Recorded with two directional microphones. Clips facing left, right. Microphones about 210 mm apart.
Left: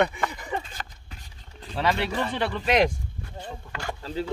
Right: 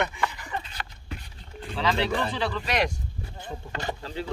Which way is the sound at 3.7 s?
20° right (ahead or behind).